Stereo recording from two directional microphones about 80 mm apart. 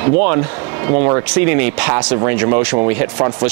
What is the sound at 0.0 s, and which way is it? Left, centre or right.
Speech, right.